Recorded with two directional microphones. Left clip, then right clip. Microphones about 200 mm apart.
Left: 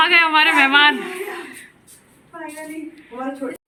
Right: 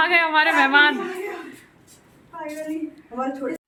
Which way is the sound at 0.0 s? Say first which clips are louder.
Left 4 dB; 5° right (ahead or behind).